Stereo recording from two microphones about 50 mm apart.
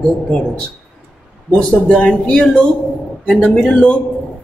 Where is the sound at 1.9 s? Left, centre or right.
Left.